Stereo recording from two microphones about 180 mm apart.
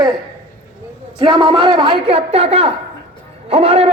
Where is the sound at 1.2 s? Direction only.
25° right (ahead or behind).